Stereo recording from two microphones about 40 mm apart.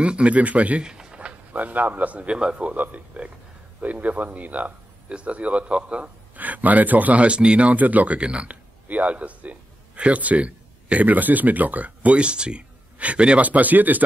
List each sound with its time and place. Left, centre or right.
0.0 s speech: right
0.8 s a sound: right
1.5 s speech: right
2.2 s a man's voice: right
2.7 s a man's voice: right
6.3 s speech: right
7.2 s a man's voice: right
7.7 s speech: right
8.2 s a man's voice: right
8.8 s a man's voice: right
11.1 s speech: right
13.4 s speech: right